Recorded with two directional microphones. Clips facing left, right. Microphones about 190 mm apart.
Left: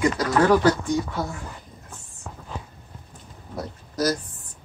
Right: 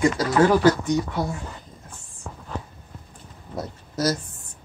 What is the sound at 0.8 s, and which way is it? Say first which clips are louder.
Speech: right 2 dB; 20° right (ahead or behind).